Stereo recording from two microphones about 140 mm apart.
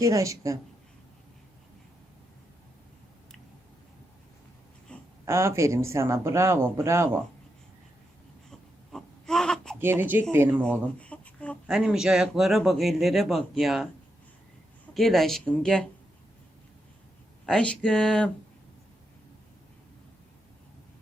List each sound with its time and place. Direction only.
0.0 s speech: 25° right (ahead or behind)
4.9 s a sound: 10° left (ahead or behind)
5.2 s speech: 20° right (ahead or behind)
8.4 s baby cry: 5° left (ahead or behind)
9.7 s speech: 15° right (ahead or behind)
10.6 s a sound: 10° left (ahead or behind)
11.6 s speech: 5° right (ahead or behind)
14.9 s speech: centre (ahead or behind)
17.4 s speech: 5° left (ahead or behind)